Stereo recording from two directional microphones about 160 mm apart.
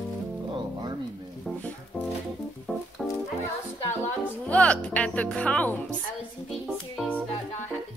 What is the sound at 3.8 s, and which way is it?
Music, 10° left (ahead or behind).